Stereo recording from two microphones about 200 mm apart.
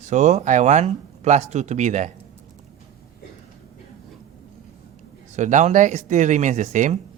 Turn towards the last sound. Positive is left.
turn(degrees=-35)  # may be behind; listen again after turning